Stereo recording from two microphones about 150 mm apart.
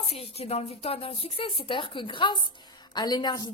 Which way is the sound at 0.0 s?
40° left (ahead or behind).